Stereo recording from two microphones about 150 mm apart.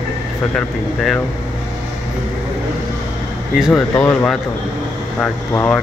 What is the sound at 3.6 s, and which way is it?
Speech, 5° left (ahead or behind).